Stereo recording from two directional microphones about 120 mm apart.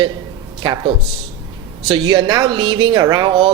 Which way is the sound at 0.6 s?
40° right (ahead or behind).